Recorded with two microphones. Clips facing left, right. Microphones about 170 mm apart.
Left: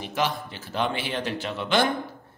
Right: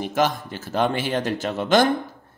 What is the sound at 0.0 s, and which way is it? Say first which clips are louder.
A man's voice: right 5 dB; 45° right (ahead or behind).